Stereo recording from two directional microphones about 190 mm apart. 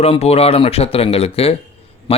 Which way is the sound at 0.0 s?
35° left (ahead or behind).